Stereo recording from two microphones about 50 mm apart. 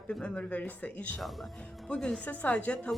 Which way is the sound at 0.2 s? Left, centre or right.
Left.